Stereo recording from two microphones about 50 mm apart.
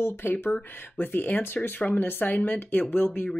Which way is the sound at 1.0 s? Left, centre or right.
Left.